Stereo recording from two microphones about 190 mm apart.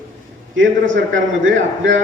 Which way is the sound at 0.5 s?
85° right.